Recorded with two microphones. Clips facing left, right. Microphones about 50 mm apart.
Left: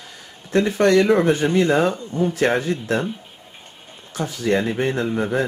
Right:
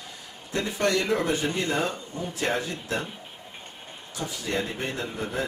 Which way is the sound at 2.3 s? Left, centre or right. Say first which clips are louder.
Left 5 dB; left.